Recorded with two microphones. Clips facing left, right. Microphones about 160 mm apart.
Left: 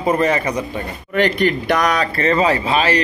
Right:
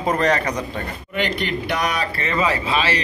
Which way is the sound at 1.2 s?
45° left (ahead or behind).